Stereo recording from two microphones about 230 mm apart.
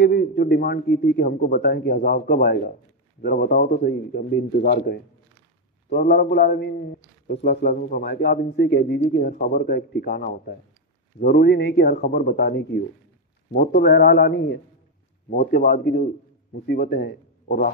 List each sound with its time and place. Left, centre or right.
0.0 s a man's voice: left